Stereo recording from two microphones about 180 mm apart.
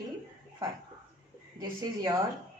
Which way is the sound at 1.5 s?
20° right (ahead or behind).